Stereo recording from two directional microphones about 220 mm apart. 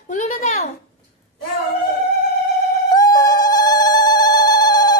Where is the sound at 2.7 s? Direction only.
15° left (ahead or behind).